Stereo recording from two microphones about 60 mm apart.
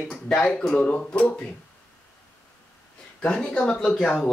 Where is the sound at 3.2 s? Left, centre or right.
Centre.